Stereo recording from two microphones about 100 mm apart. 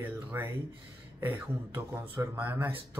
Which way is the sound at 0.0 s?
20° right (ahead or behind).